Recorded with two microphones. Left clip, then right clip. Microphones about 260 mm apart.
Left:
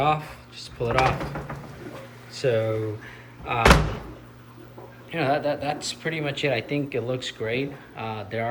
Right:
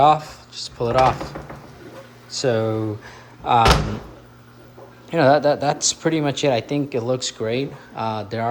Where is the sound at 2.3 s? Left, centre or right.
Centre.